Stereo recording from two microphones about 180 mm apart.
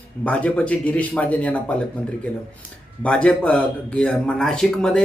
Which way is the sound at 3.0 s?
5° left (ahead or behind).